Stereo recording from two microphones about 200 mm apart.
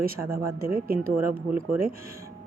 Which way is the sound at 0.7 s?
45° right (ahead or behind).